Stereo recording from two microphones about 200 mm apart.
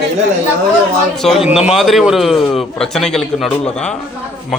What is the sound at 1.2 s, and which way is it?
Speech, centre (ahead or behind).